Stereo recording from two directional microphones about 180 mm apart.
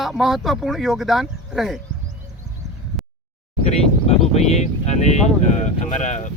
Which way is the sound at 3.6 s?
35° left (ahead or behind).